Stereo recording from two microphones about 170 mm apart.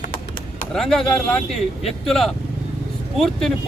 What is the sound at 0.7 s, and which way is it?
Speech, 5° left (ahead or behind).